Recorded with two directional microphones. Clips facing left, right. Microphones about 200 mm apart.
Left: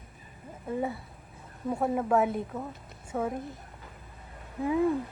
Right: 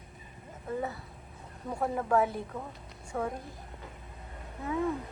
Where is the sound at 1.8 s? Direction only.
5° left (ahead or behind).